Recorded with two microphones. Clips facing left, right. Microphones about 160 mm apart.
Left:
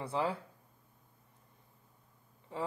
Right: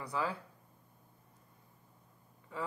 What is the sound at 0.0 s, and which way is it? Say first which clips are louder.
Speech: left 3 dB; 25° left (ahead or behind).